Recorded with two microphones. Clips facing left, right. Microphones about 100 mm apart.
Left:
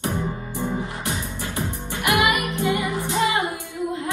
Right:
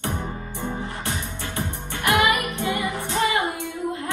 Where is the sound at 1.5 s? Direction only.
15° left (ahead or behind).